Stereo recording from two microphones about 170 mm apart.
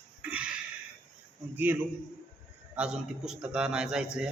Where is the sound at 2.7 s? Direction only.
5° right (ahead or behind).